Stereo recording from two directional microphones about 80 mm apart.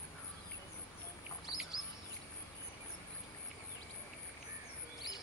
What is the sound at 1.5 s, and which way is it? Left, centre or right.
Chirp, left.